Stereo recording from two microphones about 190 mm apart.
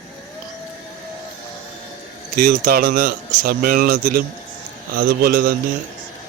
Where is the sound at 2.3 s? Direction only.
50° right (ahead or behind).